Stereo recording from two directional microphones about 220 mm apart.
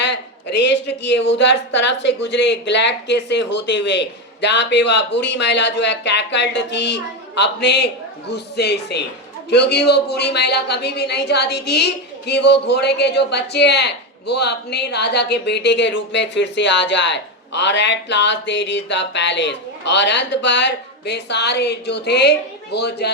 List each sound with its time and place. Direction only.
0.0 s a woman's voice: 50° left (ahead or behind)